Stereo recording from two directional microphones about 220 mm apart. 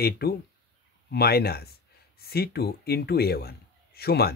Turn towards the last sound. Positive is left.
turn(degrees=45)  # may be behind; listen again after turning